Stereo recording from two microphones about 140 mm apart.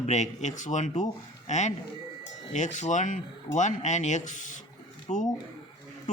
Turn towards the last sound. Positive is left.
turn(degrees=60)  # may be behind; listen again after turning